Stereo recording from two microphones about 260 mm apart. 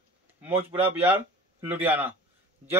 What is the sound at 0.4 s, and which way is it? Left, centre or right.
Speech, centre.